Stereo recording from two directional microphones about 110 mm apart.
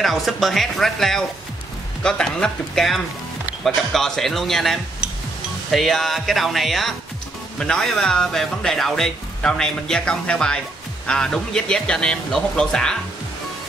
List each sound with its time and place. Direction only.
0.0 s speech: centre (ahead or behind)